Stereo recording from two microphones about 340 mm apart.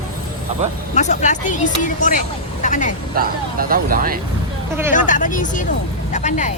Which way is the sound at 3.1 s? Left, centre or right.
Right.